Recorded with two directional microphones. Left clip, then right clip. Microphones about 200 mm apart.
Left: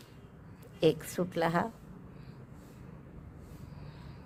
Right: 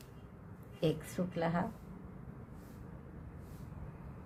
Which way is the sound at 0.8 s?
45° left (ahead or behind).